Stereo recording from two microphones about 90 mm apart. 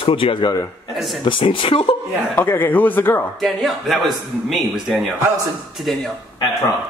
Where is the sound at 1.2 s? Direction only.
70° left (ahead or behind); by 2.0 s 90° left.